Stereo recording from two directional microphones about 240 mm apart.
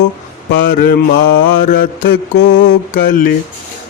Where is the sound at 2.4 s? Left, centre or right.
Left.